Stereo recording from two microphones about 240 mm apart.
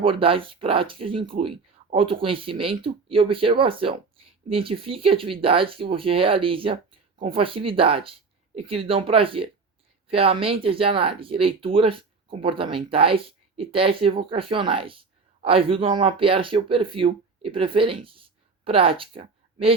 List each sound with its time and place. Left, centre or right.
0.0 s speech: right